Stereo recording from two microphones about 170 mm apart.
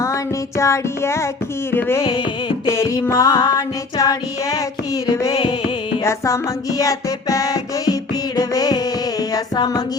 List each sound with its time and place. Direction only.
0.0 s music: 20° left (ahead or behind)
2.0 s music: 30° left (ahead or behind)
2.6 s music: 20° left (ahead or behind)
6.0 s music: 15° left (ahead or behind)